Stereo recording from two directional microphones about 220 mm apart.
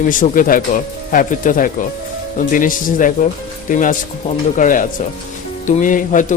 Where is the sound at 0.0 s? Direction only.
35° left (ahead or behind).